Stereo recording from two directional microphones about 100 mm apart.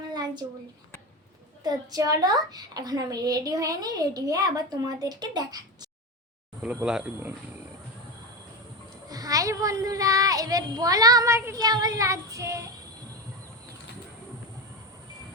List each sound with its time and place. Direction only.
0.1 s a sound: 45° right (ahead or behind)
1.6 s a child's voice: 40° right (ahead or behind)
9.0 s a child's voice: 40° right (ahead or behind)
11.3 s child singing: 25° right (ahead or behind)
11.6 s a child's voice: 40° right (ahead or behind)